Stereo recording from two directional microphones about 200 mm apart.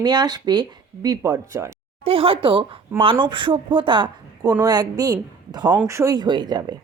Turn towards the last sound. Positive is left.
turn(degrees=-20)  # may be behind; listen again after turning